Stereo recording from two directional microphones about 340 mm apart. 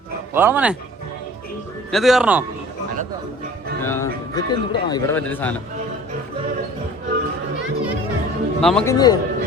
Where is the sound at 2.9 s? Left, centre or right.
Right.